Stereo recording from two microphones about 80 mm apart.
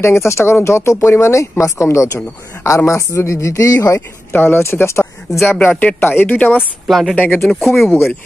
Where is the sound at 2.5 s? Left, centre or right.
Left.